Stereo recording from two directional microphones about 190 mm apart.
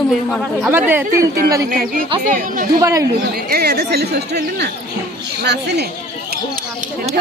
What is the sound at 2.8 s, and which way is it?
Speech, 15° right (ahead or behind).